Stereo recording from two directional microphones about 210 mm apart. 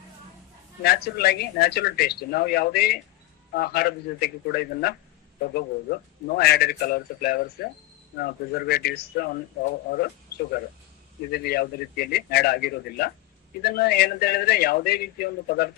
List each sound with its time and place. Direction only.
0.8 s speech: 50° left (ahead or behind)
11.3 s speech: 50° left (ahead or behind)